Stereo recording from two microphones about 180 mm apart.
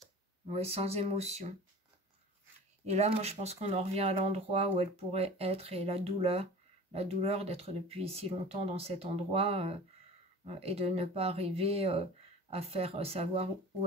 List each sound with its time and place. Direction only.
0.5 s speech: 35° right (ahead or behind)
2.8 s speech: 40° right (ahead or behind)